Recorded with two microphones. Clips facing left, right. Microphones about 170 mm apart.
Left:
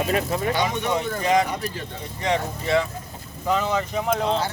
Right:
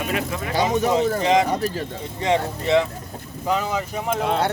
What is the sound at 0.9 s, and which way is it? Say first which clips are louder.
Speech: right 1 dB; 20° right (ahead or behind).